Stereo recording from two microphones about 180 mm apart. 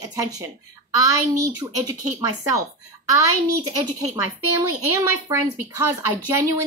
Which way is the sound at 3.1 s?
20° right (ahead or behind).